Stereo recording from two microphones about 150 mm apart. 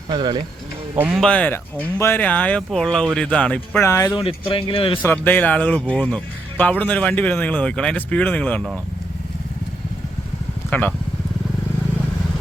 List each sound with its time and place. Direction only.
0.1 s speech: 30° right (ahead or behind)
1.1 s speech: 5° left (ahead or behind)
4.1 s speech: 35° left (ahead or behind)
5.0 s speech: 15° left (ahead or behind)
10.7 s speech: 10° left (ahead or behind)